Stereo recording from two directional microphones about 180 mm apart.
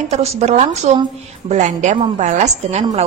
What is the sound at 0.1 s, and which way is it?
A woman's voice, 35° right (ahead or behind).